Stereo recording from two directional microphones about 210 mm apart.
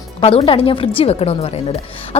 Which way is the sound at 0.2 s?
25° left (ahead or behind).